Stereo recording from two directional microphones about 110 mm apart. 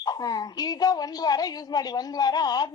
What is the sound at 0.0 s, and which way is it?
A woman's voice, 35° left (ahead or behind).